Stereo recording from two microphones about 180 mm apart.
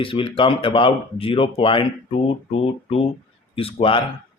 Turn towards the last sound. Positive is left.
turn(degrees=30)  # may be behind; listen again after turning